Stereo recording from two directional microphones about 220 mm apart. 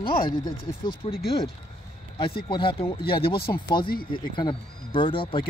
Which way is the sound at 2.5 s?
25° left (ahead or behind).